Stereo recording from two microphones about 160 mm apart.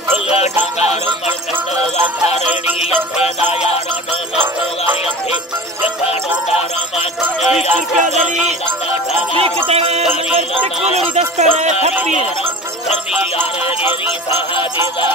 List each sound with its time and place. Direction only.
0.4 s music: 40° left (ahead or behind)
6.0 s music: 40° left (ahead or behind)
7.4 s speech: 5° right (ahead or behind)
9.7 s music: 40° right (ahead or behind)